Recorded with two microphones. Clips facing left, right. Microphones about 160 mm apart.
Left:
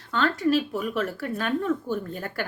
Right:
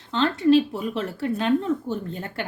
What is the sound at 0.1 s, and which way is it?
A woman's voice, 25° right (ahead or behind).